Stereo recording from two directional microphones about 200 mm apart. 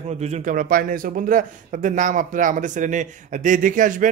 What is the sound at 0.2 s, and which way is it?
Speech, 35° right (ahead or behind).